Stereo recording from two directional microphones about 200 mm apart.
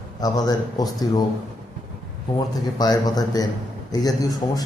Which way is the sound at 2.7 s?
20° left (ahead or behind).